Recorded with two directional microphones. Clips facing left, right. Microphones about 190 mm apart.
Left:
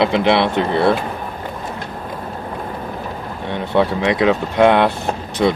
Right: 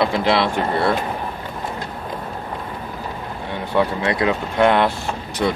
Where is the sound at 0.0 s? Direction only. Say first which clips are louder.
Left 3 dB; 20° left (ahead or behind).